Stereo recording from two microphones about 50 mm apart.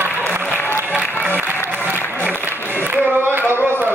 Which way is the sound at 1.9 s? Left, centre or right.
Left.